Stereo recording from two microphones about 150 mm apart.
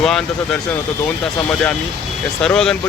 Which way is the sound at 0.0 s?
5° left (ahead or behind).